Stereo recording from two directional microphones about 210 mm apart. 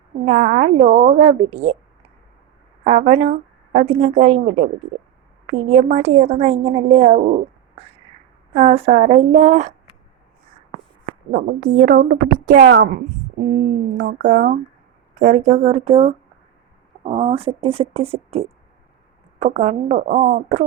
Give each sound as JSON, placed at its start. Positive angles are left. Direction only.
{"t": 0.3, "sound": "a woman's voice", "side_deg": -35}
{"t": 2.8, "sound": "a woman's voice", "side_deg": -35}
{"t": 8.5, "sound": "a woman's voice", "side_deg": -30}
{"t": 11.3, "sound": "speech", "side_deg": -40}
{"t": 13.5, "sound": "a woman's voice", "side_deg": -35}